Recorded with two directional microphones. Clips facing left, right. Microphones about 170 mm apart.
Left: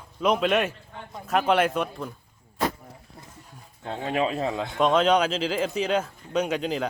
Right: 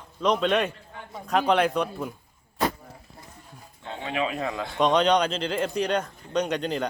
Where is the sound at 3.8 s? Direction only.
40° left (ahead or behind).